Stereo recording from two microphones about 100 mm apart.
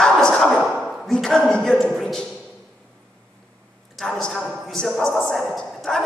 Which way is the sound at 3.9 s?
5° left (ahead or behind).